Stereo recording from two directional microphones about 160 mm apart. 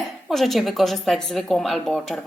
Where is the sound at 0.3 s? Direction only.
Centre (ahead or behind).